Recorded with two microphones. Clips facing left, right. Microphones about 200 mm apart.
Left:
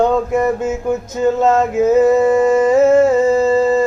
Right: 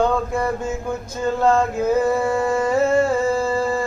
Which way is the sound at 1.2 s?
20° left (ahead or behind).